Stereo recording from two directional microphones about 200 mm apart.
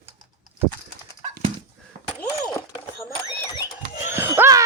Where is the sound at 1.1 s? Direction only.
30° right (ahead or behind).